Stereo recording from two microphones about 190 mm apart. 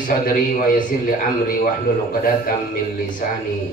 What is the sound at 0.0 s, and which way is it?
Speech, 45° left (ahead or behind).